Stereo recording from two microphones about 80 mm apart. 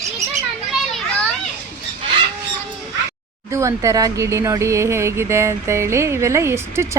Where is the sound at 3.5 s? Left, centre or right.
Right.